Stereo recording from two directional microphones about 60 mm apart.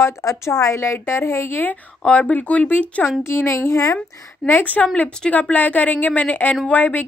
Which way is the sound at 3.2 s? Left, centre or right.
Left.